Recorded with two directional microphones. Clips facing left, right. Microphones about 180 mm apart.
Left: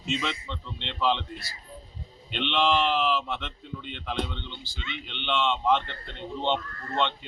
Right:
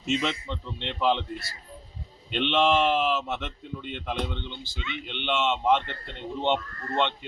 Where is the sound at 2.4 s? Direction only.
45° right (ahead or behind).